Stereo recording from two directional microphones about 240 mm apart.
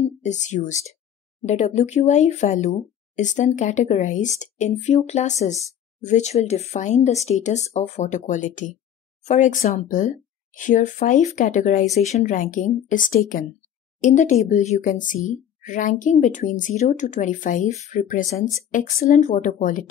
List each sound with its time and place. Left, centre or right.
0.0 s speech: left